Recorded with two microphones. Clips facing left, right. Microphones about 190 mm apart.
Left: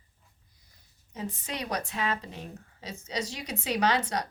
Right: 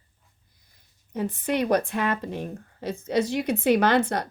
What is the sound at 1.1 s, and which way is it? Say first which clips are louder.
Speech: right 10 dB; 55° right (ahead or behind).